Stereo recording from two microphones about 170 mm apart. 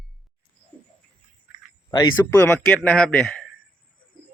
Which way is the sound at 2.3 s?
10° left (ahead or behind).